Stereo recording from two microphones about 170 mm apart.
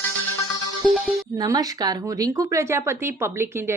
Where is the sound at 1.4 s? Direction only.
20° right (ahead or behind).